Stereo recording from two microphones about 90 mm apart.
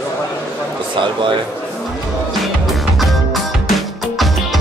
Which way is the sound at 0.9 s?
65° right (ahead or behind).